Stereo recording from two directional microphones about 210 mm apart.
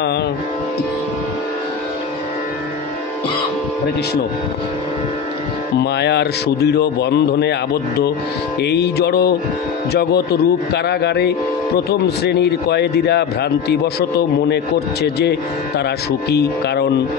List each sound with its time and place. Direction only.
5.8 s a man's voice: 50° left (ahead or behind)